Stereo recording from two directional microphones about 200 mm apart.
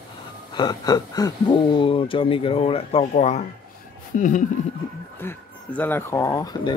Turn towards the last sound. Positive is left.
turn(degrees=20)  # may be behind; listen again after turning